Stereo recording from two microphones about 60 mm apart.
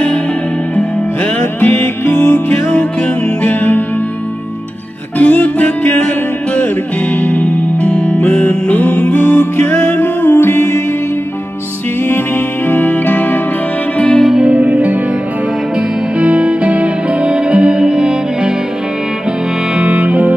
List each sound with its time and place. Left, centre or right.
1.4 s music: left
3.4 s music: left
5.2 s music: left
12.6 s music: left
13.9 s music: centre
14.2 s music: centre
14.5 s music: right
16.2 s music: centre
19.8 s music: right